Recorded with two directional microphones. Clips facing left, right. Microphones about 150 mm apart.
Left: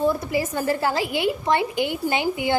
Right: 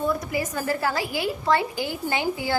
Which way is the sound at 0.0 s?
25° left (ahead or behind).